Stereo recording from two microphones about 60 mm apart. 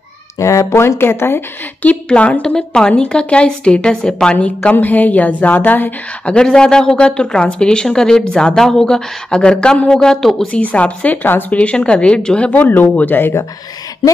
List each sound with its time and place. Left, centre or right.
0.4 s speech: left
1.9 s speech: left
6.2 s speech: centre
10.5 s speech: left
12.4 s speech: left